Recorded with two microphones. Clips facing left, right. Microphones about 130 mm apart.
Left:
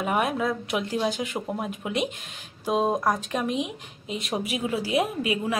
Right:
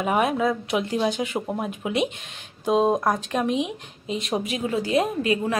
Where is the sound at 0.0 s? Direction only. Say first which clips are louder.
Right 3 dB; centre (ahead or behind).